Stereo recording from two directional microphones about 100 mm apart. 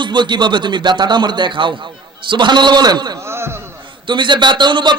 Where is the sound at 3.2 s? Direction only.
25° right (ahead or behind).